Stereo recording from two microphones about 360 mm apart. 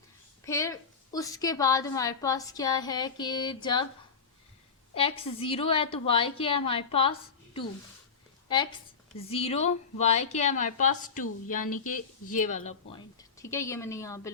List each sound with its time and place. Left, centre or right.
0.4 s a woman's voice: centre
4.9 s a woman's voice: centre
9.1 s a woman's voice: centre
13.4 s a woman's voice: centre